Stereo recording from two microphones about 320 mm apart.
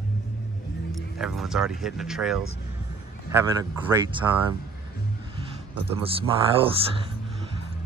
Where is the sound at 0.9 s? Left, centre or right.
Centre.